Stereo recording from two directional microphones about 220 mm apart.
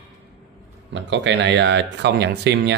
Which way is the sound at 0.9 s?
55° right (ahead or behind).